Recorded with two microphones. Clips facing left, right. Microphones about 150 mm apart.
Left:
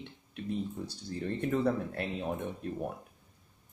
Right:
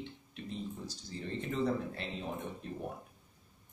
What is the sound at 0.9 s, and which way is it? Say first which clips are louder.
Speech: left 5 dB; 60° left (ahead or behind).